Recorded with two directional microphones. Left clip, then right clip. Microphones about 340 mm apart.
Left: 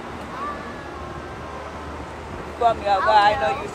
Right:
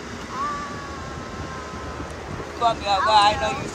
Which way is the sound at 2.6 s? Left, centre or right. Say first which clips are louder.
Left 2 dB; centre.